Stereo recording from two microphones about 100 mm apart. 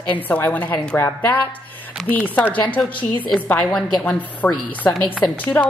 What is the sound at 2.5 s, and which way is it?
A woman's voice, 15° left (ahead or behind).